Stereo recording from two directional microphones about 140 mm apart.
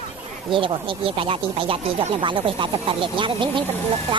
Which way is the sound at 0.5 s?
40° right (ahead or behind).